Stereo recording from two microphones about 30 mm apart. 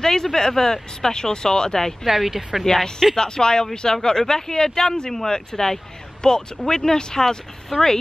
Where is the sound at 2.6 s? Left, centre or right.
Centre.